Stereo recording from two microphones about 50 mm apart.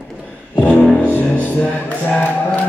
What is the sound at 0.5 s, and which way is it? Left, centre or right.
Music, left.